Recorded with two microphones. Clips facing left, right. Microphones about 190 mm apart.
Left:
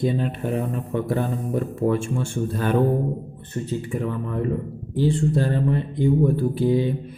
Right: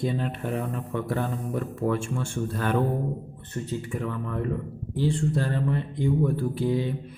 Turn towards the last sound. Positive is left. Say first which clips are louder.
# left 5 dB
turn(degrees=25)  # may be behind; listen again after turning